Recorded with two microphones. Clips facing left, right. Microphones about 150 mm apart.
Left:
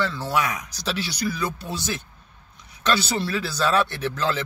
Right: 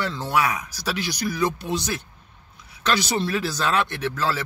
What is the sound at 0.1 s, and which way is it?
Speech, 15° right (ahead or behind).